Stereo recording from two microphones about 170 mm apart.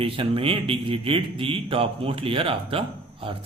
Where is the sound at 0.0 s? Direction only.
35° right (ahead or behind).